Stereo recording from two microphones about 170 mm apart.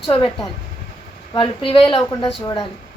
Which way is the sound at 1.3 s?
30° left (ahead or behind).